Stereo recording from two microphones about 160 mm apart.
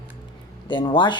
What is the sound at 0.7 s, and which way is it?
Speech, 30° left (ahead or behind).